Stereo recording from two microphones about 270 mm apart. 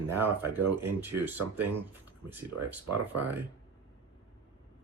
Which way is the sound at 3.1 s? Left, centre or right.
Right.